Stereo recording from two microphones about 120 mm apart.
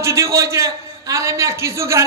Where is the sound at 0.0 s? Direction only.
25° right (ahead or behind).